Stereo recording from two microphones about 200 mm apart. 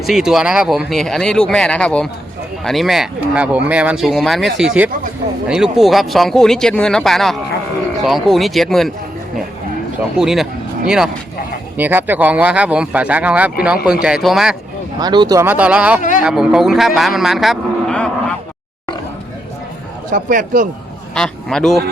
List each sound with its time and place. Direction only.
0.0 s speech: centre (ahead or behind)
10.2 s speech: centre (ahead or behind)
14.9 s speech: 20° right (ahead or behind)
16.0 s speech: 40° left (ahead or behind)
16.2 s a man's voice: 5° right (ahead or behind)
20.1 s a man's voice: 40° right (ahead or behind)
21.2 s speech: 5° left (ahead or behind)